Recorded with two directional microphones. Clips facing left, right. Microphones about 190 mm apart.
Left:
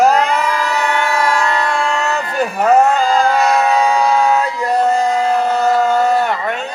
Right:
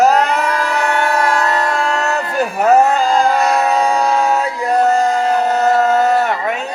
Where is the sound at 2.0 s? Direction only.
5° right (ahead or behind).